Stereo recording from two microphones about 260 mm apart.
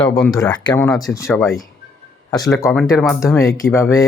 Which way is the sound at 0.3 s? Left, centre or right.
Centre.